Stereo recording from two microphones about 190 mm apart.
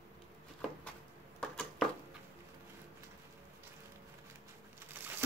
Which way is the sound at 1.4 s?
5° left (ahead or behind).